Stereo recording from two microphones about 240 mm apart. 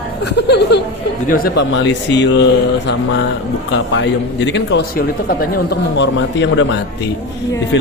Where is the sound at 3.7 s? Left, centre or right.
Left.